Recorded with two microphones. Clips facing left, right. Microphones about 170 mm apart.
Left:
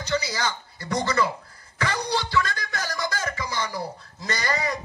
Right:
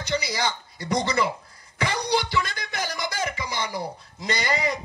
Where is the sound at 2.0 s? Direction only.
15° right (ahead or behind).